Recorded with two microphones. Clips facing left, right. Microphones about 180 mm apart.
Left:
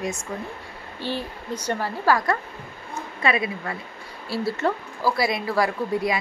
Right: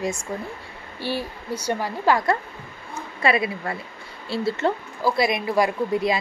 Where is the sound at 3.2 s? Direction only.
35° right (ahead or behind).